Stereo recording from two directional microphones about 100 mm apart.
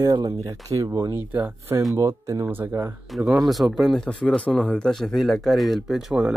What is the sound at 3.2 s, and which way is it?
Speech, 5° right (ahead or behind).